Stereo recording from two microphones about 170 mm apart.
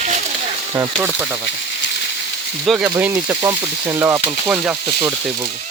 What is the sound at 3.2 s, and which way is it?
Frying, 15° right (ahead or behind).